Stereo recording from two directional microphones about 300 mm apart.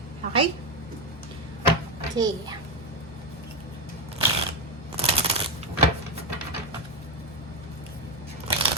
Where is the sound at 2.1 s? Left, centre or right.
Centre.